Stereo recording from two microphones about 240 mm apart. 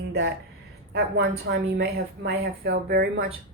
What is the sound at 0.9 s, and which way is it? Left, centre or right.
A woman's voice, right.